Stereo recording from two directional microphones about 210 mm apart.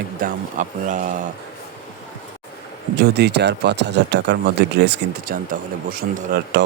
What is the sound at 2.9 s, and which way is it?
Speech, 55° right (ahead or behind).